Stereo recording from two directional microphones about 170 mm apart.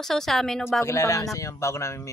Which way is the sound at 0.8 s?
15° left (ahead or behind).